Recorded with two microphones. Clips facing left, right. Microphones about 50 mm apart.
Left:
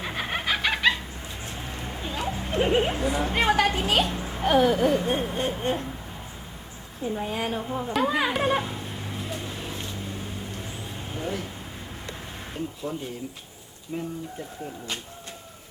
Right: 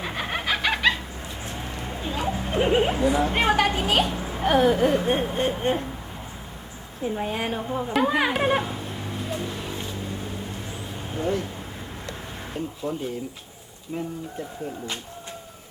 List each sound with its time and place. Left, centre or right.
0.0 s chicken: centre
1.8 s a sound: centre
7.0 s speech: centre
11.2 s speech: centre
12.5 s speech: centre